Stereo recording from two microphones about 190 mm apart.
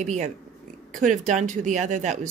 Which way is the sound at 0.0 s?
35° right (ahead or behind).